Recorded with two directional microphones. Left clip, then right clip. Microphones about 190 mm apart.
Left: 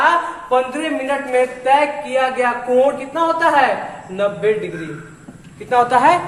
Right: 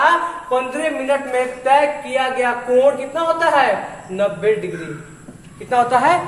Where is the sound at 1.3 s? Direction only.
10° left (ahead or behind).